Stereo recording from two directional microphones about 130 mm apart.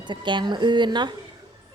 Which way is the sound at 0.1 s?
35° right (ahead or behind).